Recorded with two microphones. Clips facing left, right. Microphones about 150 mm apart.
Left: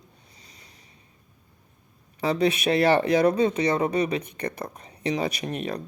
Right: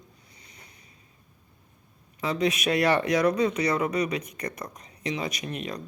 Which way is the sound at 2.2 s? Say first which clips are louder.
Left 3 dB; 30° left (ahead or behind).